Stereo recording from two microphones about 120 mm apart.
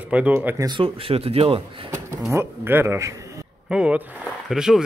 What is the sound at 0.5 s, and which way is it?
Speech, 35° right (ahead or behind).